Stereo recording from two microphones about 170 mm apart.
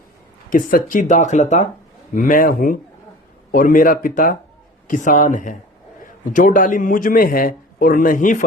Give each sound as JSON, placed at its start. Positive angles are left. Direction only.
{"t": 0.5, "sound": "a man's voice", "side_deg": 55}